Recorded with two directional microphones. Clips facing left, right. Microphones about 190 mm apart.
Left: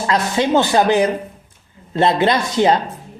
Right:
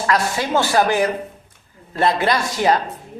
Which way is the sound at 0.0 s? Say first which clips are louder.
Left 3 dB; 20° left (ahead or behind).